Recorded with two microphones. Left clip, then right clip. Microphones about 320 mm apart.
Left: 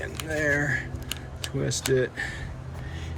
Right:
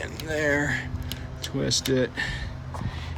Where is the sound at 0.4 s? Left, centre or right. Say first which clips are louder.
Right 1 dB; right.